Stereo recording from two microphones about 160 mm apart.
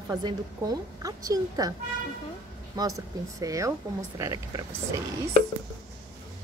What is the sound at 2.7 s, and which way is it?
A woman's voice, 20° right (ahead or behind).